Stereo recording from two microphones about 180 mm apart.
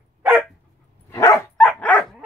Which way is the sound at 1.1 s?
20° left (ahead or behind).